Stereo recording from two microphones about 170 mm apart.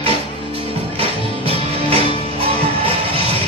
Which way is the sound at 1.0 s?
35° right (ahead or behind).